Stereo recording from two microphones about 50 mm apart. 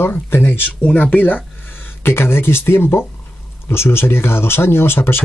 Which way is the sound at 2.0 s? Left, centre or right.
Left.